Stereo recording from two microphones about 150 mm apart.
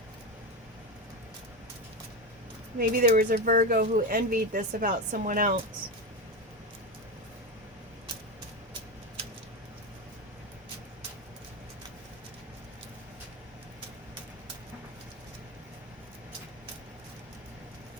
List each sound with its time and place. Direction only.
2.7 s speech: 75° right (ahead or behind)